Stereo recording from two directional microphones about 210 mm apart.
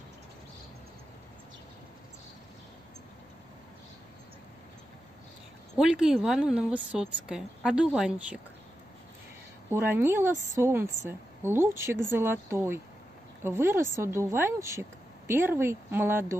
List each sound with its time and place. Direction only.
5.8 s a woman's voice: 5° right (ahead or behind)
9.7 s speech: 10° right (ahead or behind)